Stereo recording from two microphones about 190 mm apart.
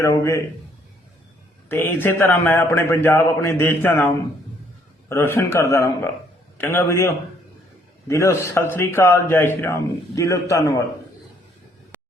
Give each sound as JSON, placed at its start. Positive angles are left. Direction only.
{"t": 0.0, "sound": "a man's voice", "side_deg": 15}
{"t": 1.7, "sound": "a man's voice", "side_deg": 10}